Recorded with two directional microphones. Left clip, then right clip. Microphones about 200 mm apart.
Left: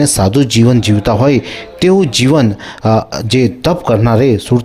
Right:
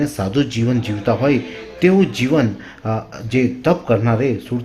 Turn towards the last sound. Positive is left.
turn(degrees=45)  # may be behind; listen again after turning